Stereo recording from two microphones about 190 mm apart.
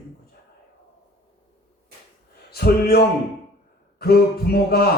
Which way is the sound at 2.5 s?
55° left (ahead or behind).